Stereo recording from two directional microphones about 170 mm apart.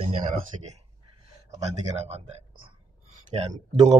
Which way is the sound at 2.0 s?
35° right (ahead or behind).